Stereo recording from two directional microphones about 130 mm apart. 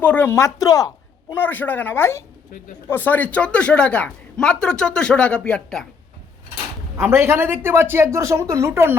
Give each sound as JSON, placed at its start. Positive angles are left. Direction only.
{"t": 0.0, "sound": "speech", "side_deg": 15}
{"t": 1.3, "sound": "a man's voice", "side_deg": 15}
{"t": 6.9, "sound": "speech", "side_deg": -20}